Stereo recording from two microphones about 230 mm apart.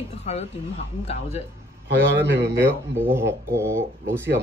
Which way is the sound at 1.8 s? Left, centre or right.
Right.